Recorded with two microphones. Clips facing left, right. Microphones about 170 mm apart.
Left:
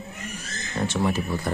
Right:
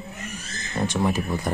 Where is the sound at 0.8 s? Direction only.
15° right (ahead or behind).